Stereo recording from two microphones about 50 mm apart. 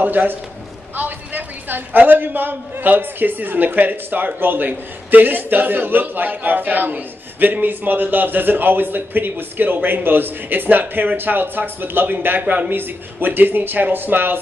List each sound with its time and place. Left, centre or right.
0.0 s a man's voice: right